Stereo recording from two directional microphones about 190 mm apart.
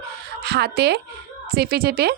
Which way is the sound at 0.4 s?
60° right (ahead or behind).